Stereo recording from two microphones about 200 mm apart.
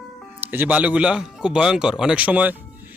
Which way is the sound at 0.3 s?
10° right (ahead or behind).